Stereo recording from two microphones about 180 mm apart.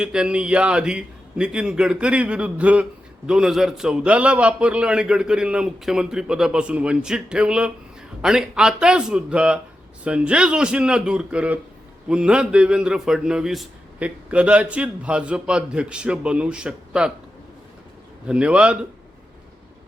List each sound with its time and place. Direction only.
0.0 s a man's voice: 5° right (ahead or behind)
18.3 s a man's voice: 5° right (ahead or behind)